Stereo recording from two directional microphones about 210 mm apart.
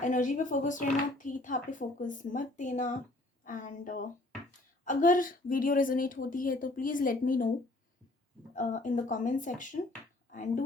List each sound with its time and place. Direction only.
0.0 s speech: 35° left (ahead or behind)
8.5 s speech: 40° left (ahead or behind)